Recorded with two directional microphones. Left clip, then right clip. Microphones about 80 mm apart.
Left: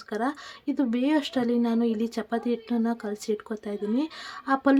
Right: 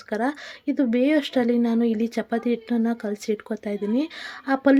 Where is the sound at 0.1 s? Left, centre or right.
Right.